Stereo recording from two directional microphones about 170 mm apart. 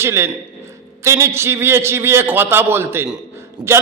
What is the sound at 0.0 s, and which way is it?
A man's voice, 15° right (ahead or behind).